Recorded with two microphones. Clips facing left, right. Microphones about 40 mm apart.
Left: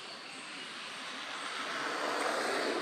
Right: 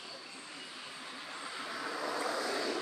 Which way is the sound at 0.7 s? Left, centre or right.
Left.